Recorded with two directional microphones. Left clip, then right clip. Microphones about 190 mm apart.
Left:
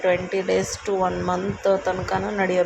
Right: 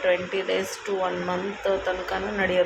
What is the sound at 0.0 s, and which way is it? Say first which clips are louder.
Speech: left 2 dB; 20° left (ahead or behind).